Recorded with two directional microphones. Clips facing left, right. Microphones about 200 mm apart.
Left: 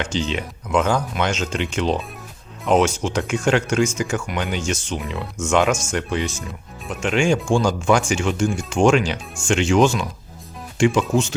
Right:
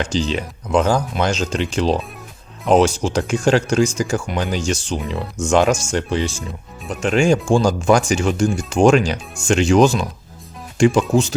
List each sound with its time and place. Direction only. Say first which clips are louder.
0.0 s speech: right 3 dB; 35° right (ahead or behind)